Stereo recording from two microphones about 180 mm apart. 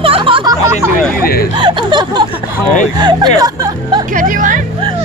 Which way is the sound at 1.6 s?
25° right (ahead or behind).